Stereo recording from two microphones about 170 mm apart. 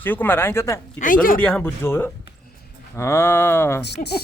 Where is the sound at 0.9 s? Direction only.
55° left (ahead or behind).